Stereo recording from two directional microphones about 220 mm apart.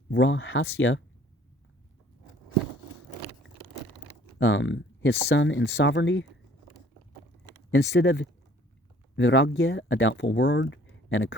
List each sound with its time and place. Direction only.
0.1 s speech: 55° left (ahead or behind)
4.4 s speech: 60° left (ahead or behind)
7.7 s speech: 50° left (ahead or behind)